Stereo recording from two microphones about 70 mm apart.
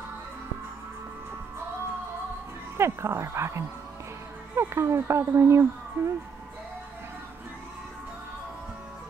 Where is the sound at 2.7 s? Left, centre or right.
Right.